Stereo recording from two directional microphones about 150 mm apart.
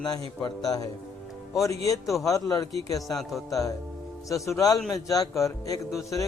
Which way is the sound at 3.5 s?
20° left (ahead or behind).